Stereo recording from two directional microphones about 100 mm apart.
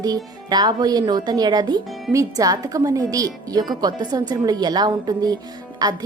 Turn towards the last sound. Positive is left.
turn(degrees=-40)  # may be behind; listen again after turning